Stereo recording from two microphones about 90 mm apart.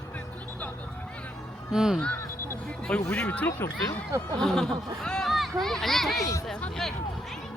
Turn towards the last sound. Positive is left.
turn(degrees=5)  # may be behind; listen again after turning